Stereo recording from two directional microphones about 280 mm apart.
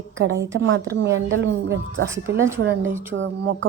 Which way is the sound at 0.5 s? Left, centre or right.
Right.